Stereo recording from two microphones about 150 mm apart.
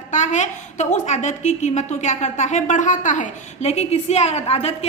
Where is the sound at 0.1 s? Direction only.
50° left (ahead or behind).